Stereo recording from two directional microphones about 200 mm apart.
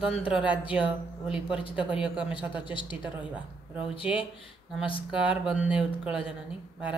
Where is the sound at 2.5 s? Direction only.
25° left (ahead or behind).